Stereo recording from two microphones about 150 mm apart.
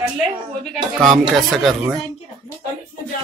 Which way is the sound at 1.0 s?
Centre (ahead or behind).